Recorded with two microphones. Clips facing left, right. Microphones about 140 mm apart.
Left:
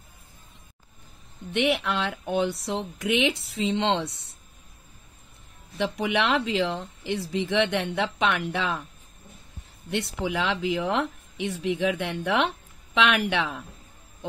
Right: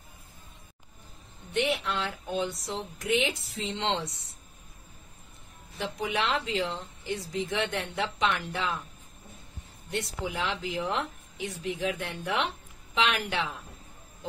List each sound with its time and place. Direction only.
1.5 s speech: 65° left (ahead or behind)
5.8 s speech: 70° left (ahead or behind)
9.8 s speech: 70° left (ahead or behind)